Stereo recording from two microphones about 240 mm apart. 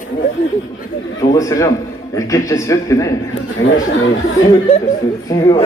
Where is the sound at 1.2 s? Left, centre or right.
Centre.